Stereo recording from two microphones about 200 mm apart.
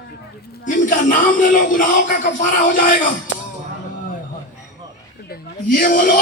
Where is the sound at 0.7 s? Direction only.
40° left (ahead or behind).